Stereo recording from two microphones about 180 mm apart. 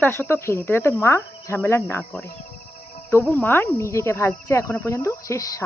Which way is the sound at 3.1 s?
10° left (ahead or behind).